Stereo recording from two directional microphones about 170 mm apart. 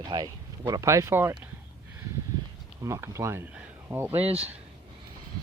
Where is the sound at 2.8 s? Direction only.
15° right (ahead or behind).